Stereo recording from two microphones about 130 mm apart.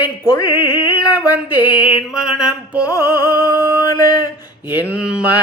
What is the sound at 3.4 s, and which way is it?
Mantra, 30° left (ahead or behind).